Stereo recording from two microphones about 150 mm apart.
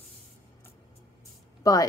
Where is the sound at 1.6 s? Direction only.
25° left (ahead or behind).